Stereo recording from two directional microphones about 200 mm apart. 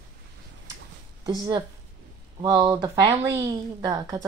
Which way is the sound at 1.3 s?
20° right (ahead or behind).